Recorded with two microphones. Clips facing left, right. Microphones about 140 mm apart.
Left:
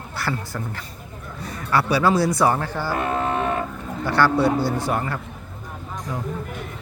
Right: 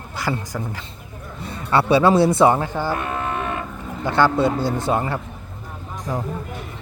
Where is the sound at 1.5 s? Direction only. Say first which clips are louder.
Right 4 dB; 25° right (ahead or behind).